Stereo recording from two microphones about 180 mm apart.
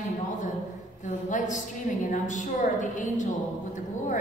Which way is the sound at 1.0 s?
40° left (ahead or behind).